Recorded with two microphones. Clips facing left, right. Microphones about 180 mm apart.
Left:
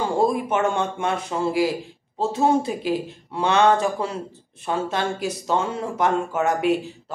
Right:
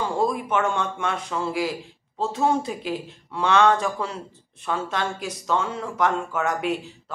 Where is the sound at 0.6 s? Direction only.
25° left (ahead or behind).